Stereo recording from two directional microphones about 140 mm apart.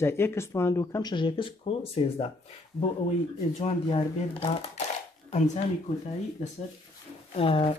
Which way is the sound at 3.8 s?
40° left (ahead or behind).